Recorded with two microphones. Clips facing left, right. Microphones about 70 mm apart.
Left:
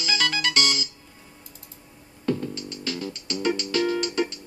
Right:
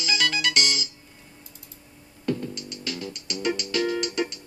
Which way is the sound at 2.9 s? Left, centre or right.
Left.